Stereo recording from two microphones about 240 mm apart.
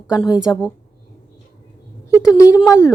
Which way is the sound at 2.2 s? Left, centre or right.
Centre.